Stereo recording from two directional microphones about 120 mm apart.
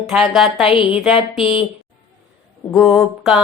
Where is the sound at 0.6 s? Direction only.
45° left (ahead or behind).